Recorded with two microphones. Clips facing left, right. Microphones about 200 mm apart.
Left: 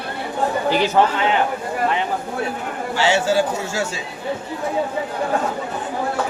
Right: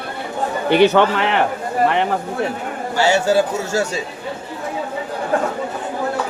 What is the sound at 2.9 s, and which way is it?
Speech, 40° right (ahead or behind).